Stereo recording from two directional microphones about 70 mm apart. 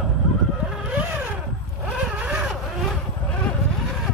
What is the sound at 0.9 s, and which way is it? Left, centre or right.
Vehicle, centre.